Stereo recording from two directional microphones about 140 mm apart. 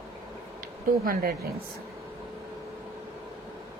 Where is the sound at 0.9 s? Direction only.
90° right.